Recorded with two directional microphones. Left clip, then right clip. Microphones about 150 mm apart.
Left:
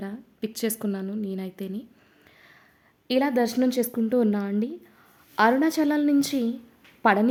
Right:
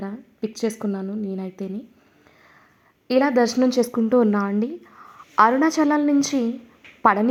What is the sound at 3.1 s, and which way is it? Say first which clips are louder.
A woman's voice: right 5 dB; 25° left (ahead or behind).